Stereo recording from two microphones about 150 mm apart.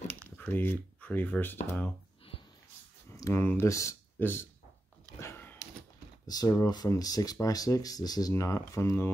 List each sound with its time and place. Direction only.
0.4 s speech: 10° left (ahead or behind)
3.1 s speech: 20° left (ahead or behind)
5.2 s dog: 15° left (ahead or behind)
6.2 s speech: 25° left (ahead or behind)